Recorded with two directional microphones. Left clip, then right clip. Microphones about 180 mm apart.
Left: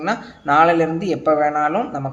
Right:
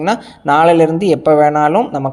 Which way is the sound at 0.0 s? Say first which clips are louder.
Right 6 dB; 35° right (ahead or behind).